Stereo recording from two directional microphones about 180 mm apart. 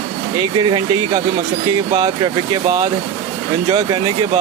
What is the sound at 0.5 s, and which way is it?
Speech, 25° right (ahead or behind).